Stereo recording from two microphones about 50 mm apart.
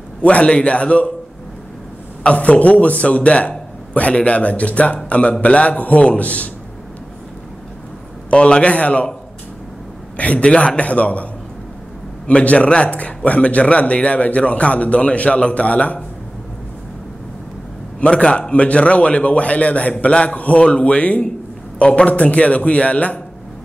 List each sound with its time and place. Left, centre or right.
0.2 s a man's voice: left
2.2 s a man's voice: left
8.3 s a man's voice: left
10.1 s a man's voice: left
12.3 s a man's voice: left
18.0 s a man's voice: centre